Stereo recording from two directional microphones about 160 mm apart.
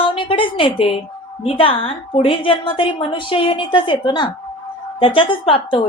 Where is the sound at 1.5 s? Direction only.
35° left (ahead or behind).